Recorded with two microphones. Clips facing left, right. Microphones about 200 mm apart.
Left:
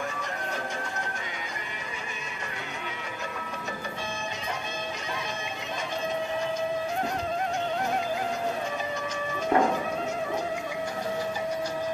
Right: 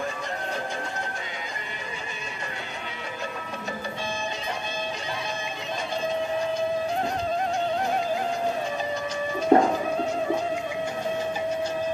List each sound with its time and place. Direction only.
9.5 s music: 35° right (ahead or behind)